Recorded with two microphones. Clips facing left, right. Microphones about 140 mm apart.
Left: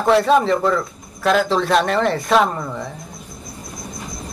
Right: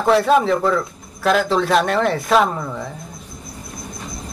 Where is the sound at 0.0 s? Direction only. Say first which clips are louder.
Even; centre (ahead or behind).